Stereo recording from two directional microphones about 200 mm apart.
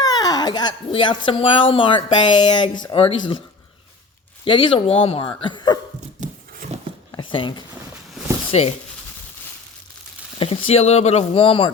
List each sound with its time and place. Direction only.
0.0 s speech: 20° left (ahead or behind)
4.4 s speech: 25° left (ahead or behind)
6.1 s a sound: 40° right (ahead or behind)
7.2 s speech: 25° left (ahead or behind)
10.3 s speech: 30° left (ahead or behind)